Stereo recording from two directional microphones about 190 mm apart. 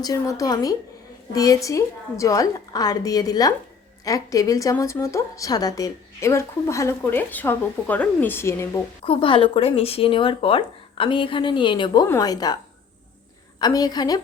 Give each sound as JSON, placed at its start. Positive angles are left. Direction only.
{"t": 0.0, "sound": "a woman's voice", "side_deg": 15}
{"t": 9.0, "sound": "speech", "side_deg": 25}
{"t": 13.6, "sound": "speech", "side_deg": 20}